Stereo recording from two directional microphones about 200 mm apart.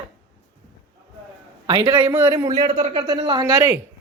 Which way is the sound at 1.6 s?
25° right (ahead or behind).